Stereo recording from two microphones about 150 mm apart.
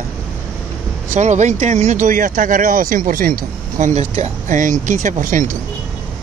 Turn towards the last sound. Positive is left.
turn(degrees=-60)  # may be behind; listen again after turning